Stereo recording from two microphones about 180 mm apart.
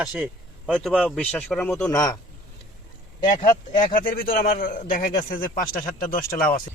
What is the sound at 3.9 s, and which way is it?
A man's voice, 50° left (ahead or behind).